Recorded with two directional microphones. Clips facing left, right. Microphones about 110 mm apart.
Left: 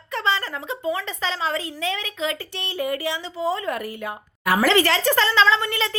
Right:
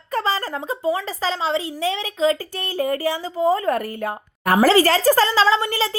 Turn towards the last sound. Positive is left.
turn(degrees=-30)  # may be behind; listen again after turning